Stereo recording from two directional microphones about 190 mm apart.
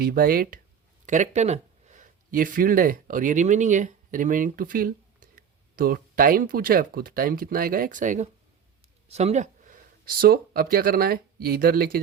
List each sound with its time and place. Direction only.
0.0 s speech: 50° right (ahead or behind)
1.0 s speech: 40° right (ahead or behind)